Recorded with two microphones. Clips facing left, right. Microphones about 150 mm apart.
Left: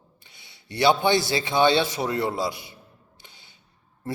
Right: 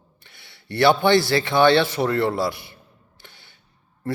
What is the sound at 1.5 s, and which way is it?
A man's voice, 55° right (ahead or behind).